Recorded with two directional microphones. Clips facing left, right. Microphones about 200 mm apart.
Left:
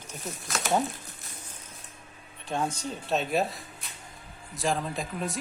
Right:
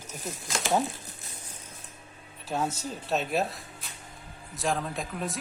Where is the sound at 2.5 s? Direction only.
5° right (ahead or behind).